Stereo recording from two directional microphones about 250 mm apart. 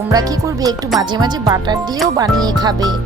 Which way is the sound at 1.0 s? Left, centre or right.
Centre.